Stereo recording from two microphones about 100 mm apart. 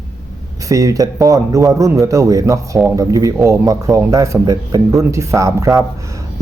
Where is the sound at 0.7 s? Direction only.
35° right (ahead or behind).